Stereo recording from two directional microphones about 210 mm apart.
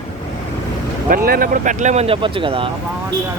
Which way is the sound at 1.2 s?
45° right (ahead or behind).